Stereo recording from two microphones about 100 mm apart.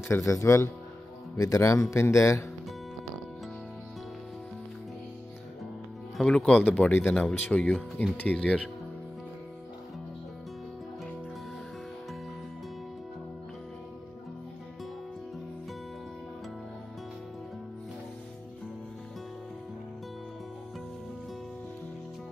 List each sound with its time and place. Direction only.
0.1 s speech: 30° left (ahead or behind)
6.1 s speech: 5° left (ahead or behind)
7.6 s speech: 5° left (ahead or behind)